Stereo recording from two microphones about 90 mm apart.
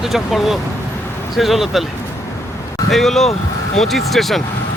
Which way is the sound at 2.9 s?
5° left (ahead or behind).